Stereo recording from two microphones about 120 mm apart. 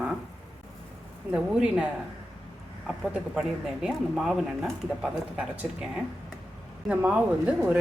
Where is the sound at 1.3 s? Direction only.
10° right (ahead or behind).